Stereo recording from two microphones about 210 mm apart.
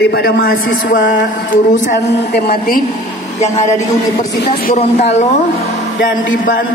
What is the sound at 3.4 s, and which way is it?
Speech, 35° left (ahead or behind).